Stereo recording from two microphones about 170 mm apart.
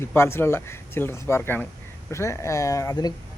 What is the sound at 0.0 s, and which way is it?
Speech, 15° left (ahead or behind).